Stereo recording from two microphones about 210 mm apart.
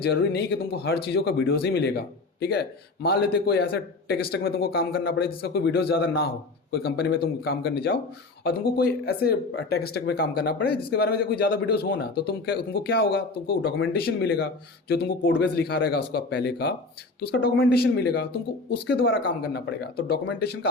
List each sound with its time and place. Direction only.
0.0 s speech: 50° left (ahead or behind)